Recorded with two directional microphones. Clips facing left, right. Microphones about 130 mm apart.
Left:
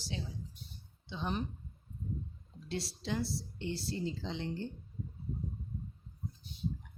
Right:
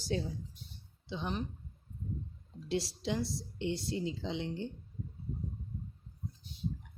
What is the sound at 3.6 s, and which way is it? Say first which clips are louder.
Speech: right 3 dB; 20° right (ahead or behind).